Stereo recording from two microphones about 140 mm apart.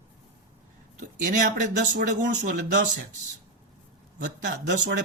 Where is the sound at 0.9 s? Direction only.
65° right (ahead or behind).